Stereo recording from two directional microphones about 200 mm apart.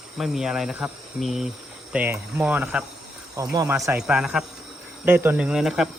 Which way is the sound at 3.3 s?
20° right (ahead or behind).